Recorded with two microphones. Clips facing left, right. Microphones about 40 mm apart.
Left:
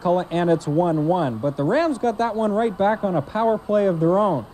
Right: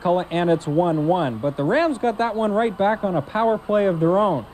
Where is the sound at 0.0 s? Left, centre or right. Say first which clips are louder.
Even; right.